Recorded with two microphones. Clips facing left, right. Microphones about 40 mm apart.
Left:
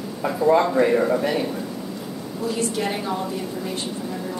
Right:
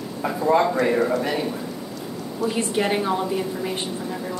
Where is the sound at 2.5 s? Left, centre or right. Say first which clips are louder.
Right 2 dB; right.